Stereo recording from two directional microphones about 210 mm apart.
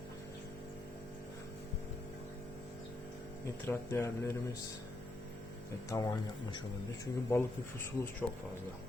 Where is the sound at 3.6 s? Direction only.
10° left (ahead or behind).